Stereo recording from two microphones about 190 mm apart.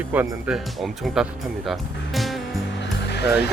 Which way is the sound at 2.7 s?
65° left (ahead or behind).